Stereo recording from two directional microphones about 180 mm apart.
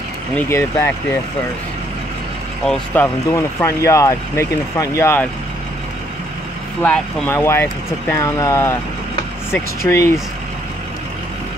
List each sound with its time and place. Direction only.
0.4 s speech: 15° left (ahead or behind)
2.6 s speech: 5° left (ahead or behind)
6.8 s speech: 5° left (ahead or behind)